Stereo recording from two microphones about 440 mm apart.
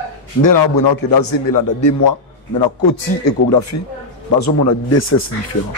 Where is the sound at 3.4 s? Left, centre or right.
Left.